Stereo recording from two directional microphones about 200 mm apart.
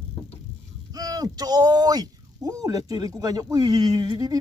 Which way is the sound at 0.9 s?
20° right (ahead or behind).